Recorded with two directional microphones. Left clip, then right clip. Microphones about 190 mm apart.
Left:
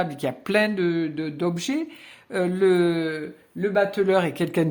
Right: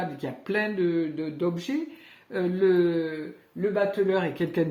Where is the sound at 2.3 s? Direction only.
35° left (ahead or behind).